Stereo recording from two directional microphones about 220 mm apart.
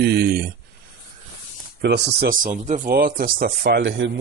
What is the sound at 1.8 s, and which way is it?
Speech, 45° right (ahead or behind).